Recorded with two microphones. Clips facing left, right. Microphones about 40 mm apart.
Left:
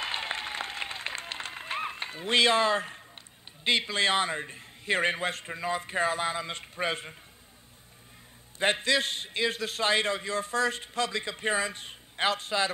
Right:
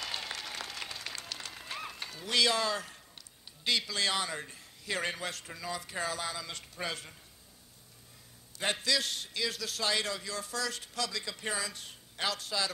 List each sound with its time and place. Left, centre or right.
0.0 s applause: left
3.6 s a man's voice: left
8.5 s a man's voice: left